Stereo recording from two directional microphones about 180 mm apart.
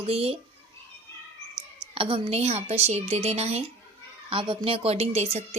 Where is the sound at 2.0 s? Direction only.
30° right (ahead or behind).